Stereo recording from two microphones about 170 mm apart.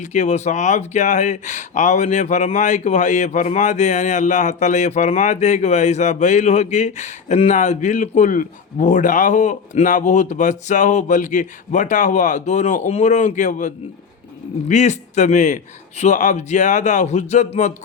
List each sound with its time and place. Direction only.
0.0 s speech: 45° left (ahead or behind)